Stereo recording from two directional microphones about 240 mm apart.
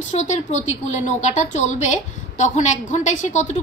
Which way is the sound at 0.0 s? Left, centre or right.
Left.